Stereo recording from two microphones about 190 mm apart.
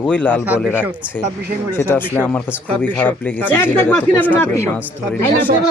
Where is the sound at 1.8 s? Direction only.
10° left (ahead or behind).